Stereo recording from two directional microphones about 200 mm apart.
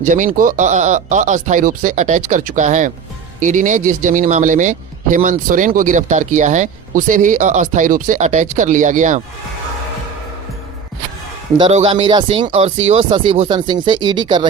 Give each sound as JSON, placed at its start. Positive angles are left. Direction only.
{"t": 0.0, "sound": "speech", "side_deg": -40}
{"t": 11.7, "sound": "speech", "side_deg": -35}